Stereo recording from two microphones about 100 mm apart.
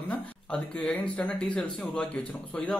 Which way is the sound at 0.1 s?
10° left (ahead or behind).